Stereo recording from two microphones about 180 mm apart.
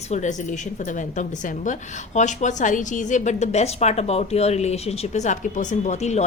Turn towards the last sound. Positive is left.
turn(degrees=40)  # may be behind; listen again after turning